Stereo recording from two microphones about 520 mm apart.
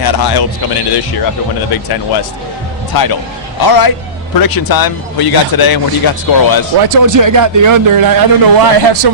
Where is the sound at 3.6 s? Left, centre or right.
Left.